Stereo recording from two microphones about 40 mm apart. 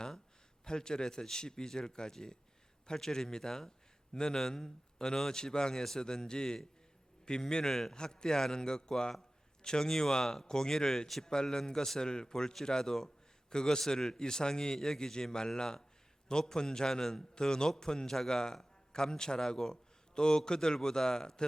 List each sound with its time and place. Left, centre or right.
0.6 s a man's voice: centre
7.9 s a man's voice: centre